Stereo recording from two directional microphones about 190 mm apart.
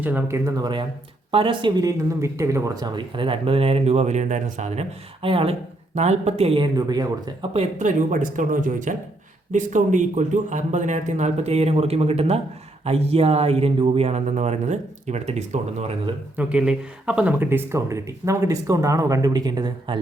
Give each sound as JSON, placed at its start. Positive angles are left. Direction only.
{"t": 0.0, "sound": "speech", "side_deg": -10}
{"t": 7.5, "sound": "speech", "side_deg": -35}
{"t": 16.4, "sound": "speech", "side_deg": -5}